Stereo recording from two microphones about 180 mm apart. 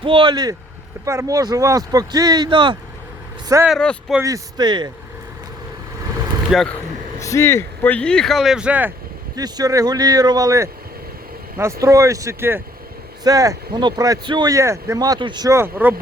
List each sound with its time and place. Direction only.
0.0 s speech: 30° right (ahead or behind)
3.7 s speech: centre (ahead or behind)
4.2 s speech: 20° right (ahead or behind)
6.5 s speech: centre (ahead or behind)
7.2 s speech: 15° left (ahead or behind); by 8.9 s 5° right (ahead or behind)
9.3 s speech: 20° right (ahead or behind)
11.8 s speech: 15° right (ahead or behind)